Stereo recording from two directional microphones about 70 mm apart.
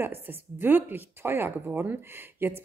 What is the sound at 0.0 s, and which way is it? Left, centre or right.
Speech, right.